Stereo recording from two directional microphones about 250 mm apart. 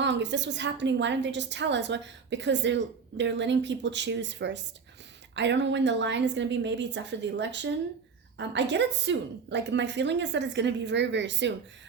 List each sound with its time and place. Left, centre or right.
0.0 s a woman's voice: right